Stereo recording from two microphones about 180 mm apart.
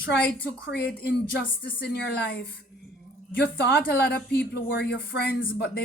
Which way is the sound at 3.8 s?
65° left (ahead or behind).